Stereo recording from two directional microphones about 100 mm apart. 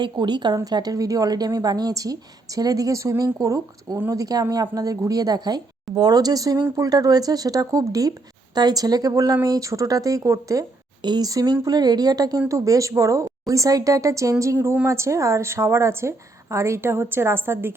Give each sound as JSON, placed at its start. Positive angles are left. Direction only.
{"t": 0.0, "sound": "a woman's voice", "side_deg": -50}
{"t": 11.0, "sound": "a woman's voice", "side_deg": -45}